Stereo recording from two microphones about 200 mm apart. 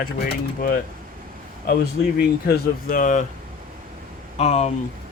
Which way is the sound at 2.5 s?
45° left (ahead or behind).